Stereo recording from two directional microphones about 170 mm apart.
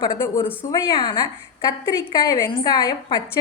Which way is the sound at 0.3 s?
15° left (ahead or behind).